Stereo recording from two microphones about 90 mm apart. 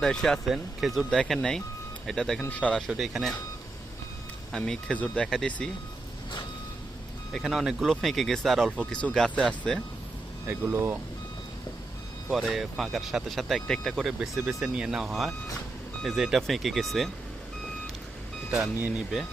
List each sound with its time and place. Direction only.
0.0 s speech: 5° left (ahead or behind)
2.4 s speech: 15° left (ahead or behind)
2.9 s speech: 5° right (ahead or behind)
4.5 s speech: 5° left (ahead or behind)
7.3 s speech: 5° right (ahead or behind)
8.7 s speech: 10° left (ahead or behind)
10.5 s speech: 25° right (ahead or behind)
12.3 s speech: centre (ahead or behind)